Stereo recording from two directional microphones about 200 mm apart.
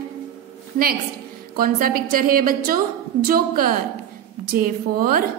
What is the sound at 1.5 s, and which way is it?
A woman's voice, 45° right (ahead or behind).